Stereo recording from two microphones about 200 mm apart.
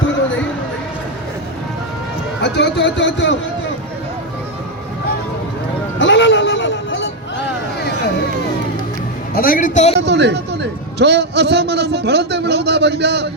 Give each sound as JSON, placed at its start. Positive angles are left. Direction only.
{"t": 2.4, "sound": "a man's voice", "side_deg": 60}
{"t": 6.0, "sound": "a sound", "side_deg": 70}
{"t": 9.3, "sound": "a woman's voice", "side_deg": 45}
{"t": 10.1, "sound": "a man's voice", "side_deg": -60}